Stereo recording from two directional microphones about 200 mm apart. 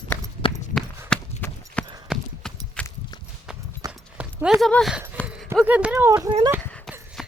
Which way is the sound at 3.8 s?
15° right (ahead or behind).